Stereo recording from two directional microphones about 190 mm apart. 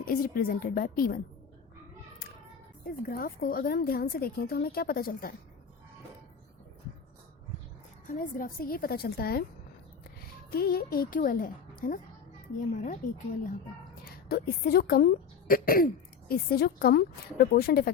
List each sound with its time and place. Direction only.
0.0 s a woman's voice: 50° left (ahead or behind)
2.8 s a woman's voice: 50° left (ahead or behind)
8.0 s a woman's voice: 45° left (ahead or behind)
10.5 s a woman's voice: 50° left (ahead or behind)
14.0 s a woman's voice: 50° left (ahead or behind)